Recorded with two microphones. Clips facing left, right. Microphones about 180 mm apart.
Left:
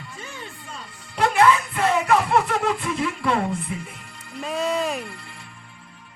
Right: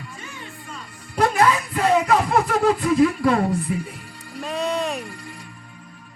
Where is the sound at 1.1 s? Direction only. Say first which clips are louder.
Even; 40° right (ahead or behind).